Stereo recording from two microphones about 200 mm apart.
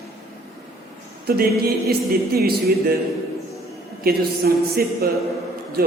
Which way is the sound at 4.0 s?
50° right (ahead or behind).